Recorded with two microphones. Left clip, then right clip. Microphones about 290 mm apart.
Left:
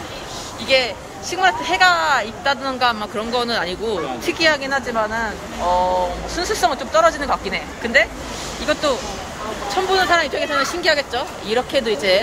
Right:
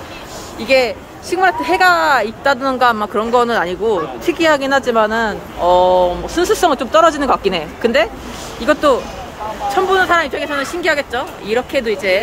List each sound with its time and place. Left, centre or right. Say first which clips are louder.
0.7 s speech: right 4 dB; centre